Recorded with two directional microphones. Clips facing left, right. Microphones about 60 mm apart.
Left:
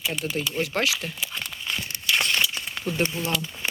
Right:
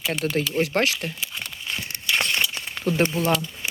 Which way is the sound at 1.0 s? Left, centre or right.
Centre.